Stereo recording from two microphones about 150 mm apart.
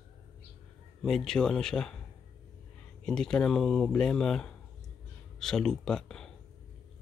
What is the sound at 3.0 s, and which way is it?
Speech, 5° left (ahead or behind).